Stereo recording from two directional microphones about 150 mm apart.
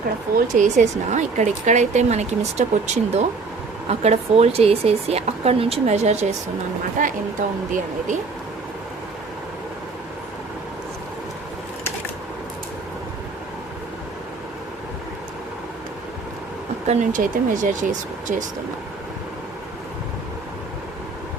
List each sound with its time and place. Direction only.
0.3 s speech: 55° right (ahead or behind)
7.0 s speech: 60° right (ahead or behind)
16.8 s speech: 50° right (ahead or behind)